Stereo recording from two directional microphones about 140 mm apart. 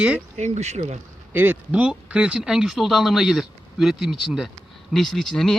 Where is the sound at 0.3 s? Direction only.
55° right (ahead or behind).